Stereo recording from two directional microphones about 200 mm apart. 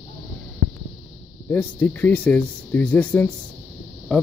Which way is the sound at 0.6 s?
80° right.